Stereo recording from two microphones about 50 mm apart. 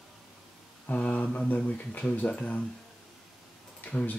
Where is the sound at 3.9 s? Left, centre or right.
Left.